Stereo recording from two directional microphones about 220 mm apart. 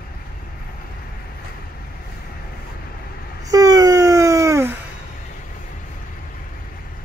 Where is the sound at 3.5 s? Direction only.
15° right (ahead or behind).